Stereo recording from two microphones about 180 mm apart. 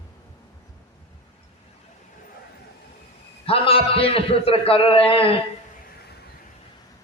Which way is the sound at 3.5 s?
30° left (ahead or behind).